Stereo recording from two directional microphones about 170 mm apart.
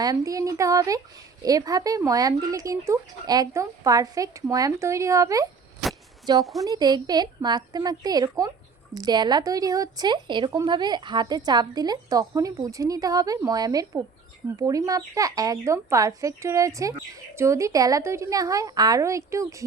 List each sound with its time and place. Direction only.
0.0 s speech: 20° right (ahead or behind)
5.8 s a sound: centre (ahead or behind)
6.4 s a woman's voice: centre (ahead or behind)
6.7 s speech: 25° right (ahead or behind)